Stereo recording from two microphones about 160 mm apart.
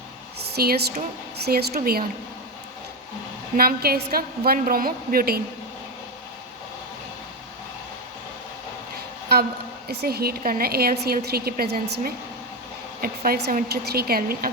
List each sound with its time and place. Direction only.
0.5 s a woman's voice: 75° right (ahead or behind)
3.6 s a woman's voice: 70° right (ahead or behind)
9.9 s a woman's voice: 85° right; by 14.5 s 65° right (ahead or behind)